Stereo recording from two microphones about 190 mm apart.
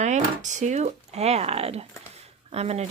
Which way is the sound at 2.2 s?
35° right (ahead or behind).